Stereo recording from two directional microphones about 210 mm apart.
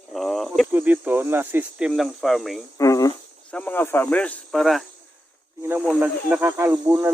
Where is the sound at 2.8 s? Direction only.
15° left (ahead or behind).